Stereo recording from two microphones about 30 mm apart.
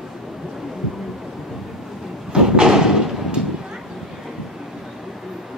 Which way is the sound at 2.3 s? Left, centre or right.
Right.